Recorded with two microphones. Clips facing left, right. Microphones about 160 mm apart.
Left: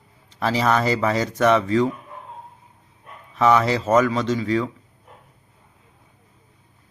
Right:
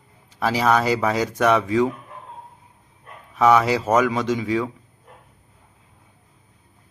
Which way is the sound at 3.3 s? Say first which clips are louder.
Right 1 dB; 10° right (ahead or behind).